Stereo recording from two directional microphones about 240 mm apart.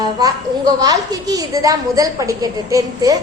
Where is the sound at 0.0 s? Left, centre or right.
Centre.